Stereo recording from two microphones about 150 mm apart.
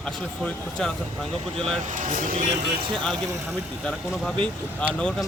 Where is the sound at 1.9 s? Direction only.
55° right (ahead or behind).